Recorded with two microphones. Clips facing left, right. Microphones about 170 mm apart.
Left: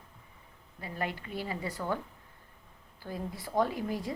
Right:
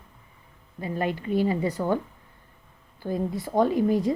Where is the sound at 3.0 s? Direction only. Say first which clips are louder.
Right 10 dB; 25° right (ahead or behind).